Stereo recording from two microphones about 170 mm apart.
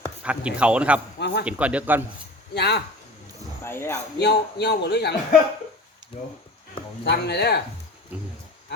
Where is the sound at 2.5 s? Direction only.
75° left (ahead or behind).